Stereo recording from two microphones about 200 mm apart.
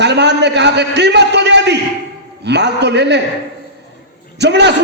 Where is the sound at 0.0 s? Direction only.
60° right (ahead or behind).